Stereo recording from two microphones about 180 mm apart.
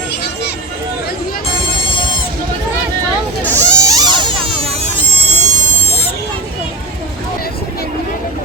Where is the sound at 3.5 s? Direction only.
15° right (ahead or behind); by 5.0 s 30° right (ahead or behind).